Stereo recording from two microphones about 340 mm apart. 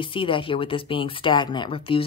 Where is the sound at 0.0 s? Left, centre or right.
Centre.